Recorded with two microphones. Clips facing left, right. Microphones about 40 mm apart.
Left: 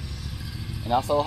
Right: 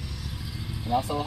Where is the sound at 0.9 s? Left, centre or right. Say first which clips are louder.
Left 3 dB; left.